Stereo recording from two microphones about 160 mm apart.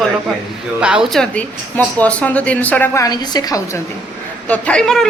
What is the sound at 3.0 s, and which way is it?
Speech, 25° left (ahead or behind).